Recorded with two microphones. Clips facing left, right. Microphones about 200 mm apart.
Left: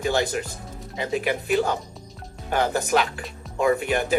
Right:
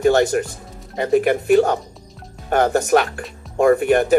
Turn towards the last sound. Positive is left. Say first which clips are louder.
# right 7 dB
turn(degrees=-50)  # may be behind; listen again after turning